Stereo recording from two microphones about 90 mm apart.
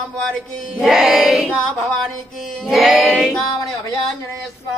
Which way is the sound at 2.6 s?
Centre (ahead or behind).